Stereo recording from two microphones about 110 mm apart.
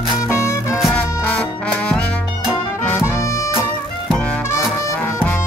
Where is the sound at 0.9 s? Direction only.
10° left (ahead or behind).